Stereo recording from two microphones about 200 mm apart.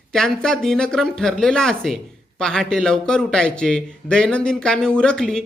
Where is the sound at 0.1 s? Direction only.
Centre (ahead or behind).